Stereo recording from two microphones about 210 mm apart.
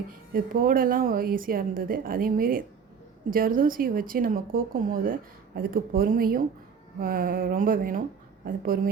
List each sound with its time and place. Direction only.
0.3 s a woman's voice: 45° right (ahead or behind)